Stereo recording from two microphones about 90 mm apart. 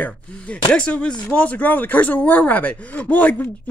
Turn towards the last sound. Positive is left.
turn(degrees=15)  # may be behind; listen again after turning